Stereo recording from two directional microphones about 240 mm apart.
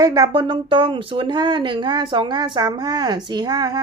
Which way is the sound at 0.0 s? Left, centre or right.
Centre.